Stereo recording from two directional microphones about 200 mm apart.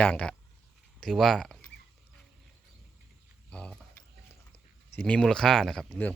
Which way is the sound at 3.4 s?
5° left (ahead or behind).